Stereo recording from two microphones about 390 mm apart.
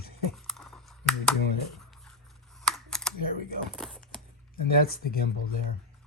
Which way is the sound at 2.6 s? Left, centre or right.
Centre.